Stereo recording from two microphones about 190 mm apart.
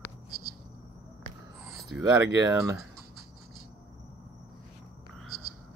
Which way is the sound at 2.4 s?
15° right (ahead or behind).